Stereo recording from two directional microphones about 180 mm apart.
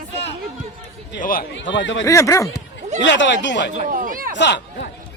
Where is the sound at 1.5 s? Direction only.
90° left.